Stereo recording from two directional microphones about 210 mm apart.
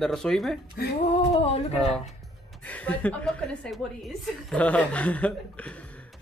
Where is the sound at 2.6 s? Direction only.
5° left (ahead or behind).